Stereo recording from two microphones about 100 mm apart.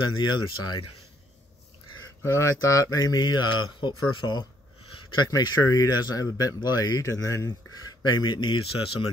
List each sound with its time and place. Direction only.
0.2 s speech: 50° left (ahead or behind)
2.2 s speech: 25° left (ahead or behind)
8.0 s speech: 45° left (ahead or behind); by 9.1 s 65° left (ahead or behind)